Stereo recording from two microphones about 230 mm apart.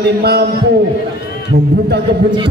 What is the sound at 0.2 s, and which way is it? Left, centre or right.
Speech, right.